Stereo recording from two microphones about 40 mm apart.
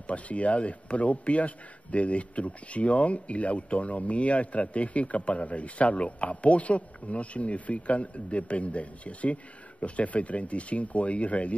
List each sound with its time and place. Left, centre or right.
0.0 s a man's voice: left